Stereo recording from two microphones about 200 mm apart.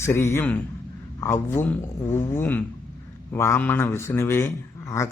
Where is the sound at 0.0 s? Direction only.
15° left (ahead or behind).